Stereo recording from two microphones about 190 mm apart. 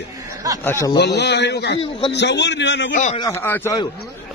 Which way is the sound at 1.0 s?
60° left (ahead or behind).